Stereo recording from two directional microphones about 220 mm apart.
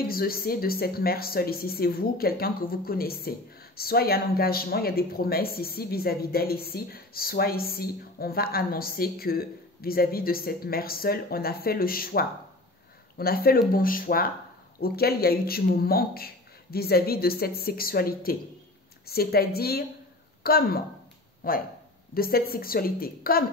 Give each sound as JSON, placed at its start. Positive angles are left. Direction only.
{"t": 0.0, "sound": "a woman's voice", "side_deg": 45}